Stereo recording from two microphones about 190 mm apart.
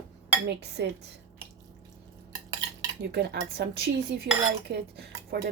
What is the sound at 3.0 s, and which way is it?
Cutlery, 60° right (ahead or behind).